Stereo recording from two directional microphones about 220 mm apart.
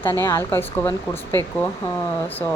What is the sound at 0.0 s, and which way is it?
Speech, 10° left (ahead or behind).